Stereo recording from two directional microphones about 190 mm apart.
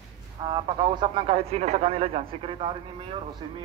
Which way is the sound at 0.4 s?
25° right (ahead or behind).